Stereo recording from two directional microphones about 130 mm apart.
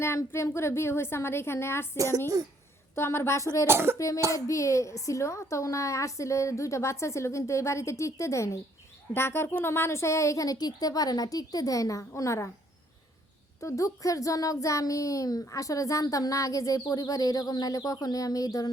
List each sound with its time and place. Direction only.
0.0 s a child's voice: 20° left (ahead or behind)
2.9 s a child's voice: 20° left (ahead or behind)
3.7 s speech: 20° right (ahead or behind)
3.9 s a child's voice: 25° left (ahead or behind)
13.6 s a child's voice: 25° left (ahead or behind)